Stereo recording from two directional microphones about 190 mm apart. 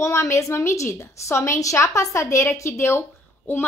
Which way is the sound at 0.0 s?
15° left (ahead or behind).